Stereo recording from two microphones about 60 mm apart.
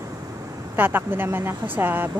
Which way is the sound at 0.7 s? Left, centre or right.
Right.